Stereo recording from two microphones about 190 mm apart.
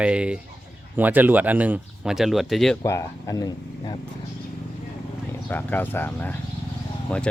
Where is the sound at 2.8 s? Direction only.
15° left (ahead or behind).